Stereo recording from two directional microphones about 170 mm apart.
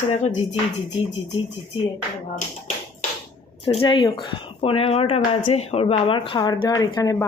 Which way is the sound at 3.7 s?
30° left (ahead or behind).